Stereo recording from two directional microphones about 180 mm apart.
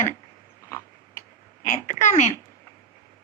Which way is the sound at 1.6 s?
40° left (ahead or behind).